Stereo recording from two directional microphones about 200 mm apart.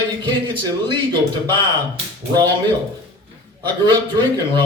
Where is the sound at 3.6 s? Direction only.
20° right (ahead or behind).